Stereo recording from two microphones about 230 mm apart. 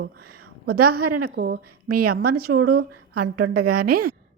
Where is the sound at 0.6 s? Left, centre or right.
Right.